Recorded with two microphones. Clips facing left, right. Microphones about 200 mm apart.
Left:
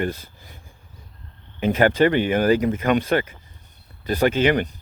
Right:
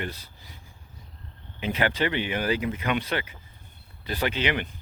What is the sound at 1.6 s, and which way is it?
Speech, 50° left (ahead or behind).